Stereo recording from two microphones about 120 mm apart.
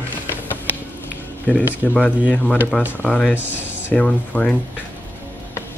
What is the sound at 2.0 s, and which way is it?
Speech, 10° left (ahead or behind).